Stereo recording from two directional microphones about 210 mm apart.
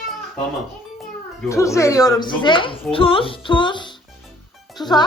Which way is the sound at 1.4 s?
15° left (ahead or behind).